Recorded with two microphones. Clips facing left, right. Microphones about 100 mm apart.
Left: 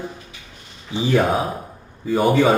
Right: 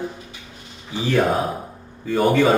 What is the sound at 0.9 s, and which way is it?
Mantra, 25° left (ahead or behind).